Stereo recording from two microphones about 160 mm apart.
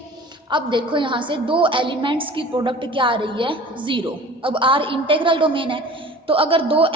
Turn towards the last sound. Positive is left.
turn(degrees=-35)  # may be behind; listen again after turning